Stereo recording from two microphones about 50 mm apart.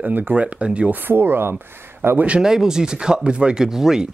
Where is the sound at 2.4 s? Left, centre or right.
Centre.